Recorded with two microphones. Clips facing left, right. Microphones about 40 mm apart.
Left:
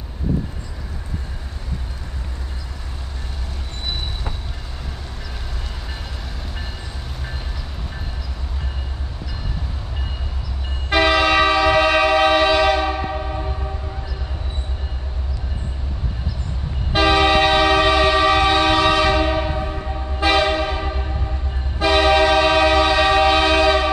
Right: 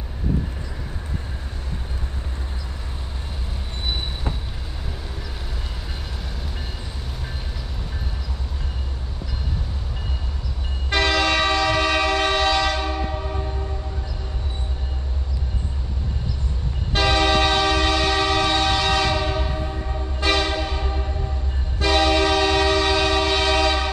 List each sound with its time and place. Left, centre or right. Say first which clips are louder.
10.9 s train: left 4 dB; centre
16.9 s train: left 4 dB; centre
20.2 s train horn: left 5 dB; centre
21.7 s train: left 4 dB; centre